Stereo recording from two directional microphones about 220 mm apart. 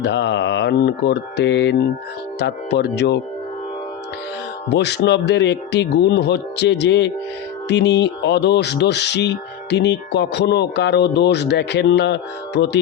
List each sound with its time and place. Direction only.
0.0 s speech: 50° left (ahead or behind)
4.7 s speech: 50° left (ahead or behind)